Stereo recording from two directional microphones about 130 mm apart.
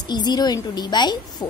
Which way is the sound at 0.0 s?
35° left (ahead or behind).